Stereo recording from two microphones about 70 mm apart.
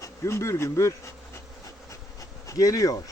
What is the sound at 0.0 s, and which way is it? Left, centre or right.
Speech, left.